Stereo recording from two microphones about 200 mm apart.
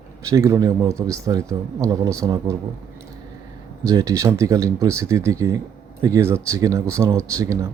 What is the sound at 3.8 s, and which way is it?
Speech, 15° right (ahead or behind).